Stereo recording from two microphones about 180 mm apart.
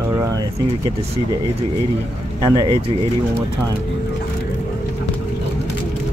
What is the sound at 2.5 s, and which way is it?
Speech, 20° right (ahead or behind).